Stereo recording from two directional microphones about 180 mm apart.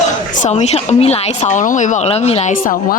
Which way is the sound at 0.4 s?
35° left (ahead or behind).